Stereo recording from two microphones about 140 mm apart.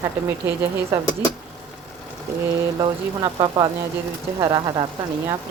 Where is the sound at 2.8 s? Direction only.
30° right (ahead or behind).